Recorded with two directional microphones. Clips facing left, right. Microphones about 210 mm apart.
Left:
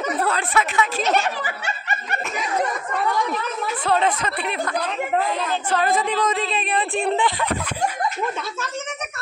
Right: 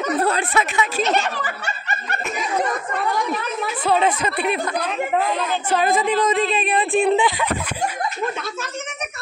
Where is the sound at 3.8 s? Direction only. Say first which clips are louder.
Right 2 dB; 5° right (ahead or behind).